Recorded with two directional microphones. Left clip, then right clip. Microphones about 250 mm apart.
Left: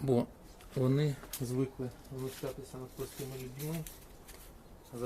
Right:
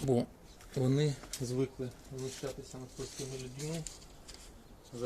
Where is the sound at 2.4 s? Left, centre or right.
Centre.